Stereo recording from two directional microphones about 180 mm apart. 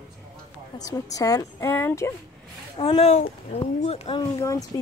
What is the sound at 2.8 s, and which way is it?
Speech, 30° left (ahead or behind).